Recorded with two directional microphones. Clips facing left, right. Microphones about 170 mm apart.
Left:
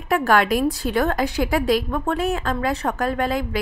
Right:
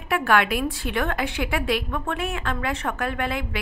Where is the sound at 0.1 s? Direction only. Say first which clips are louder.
Left 3 dB; 40° left (ahead or behind).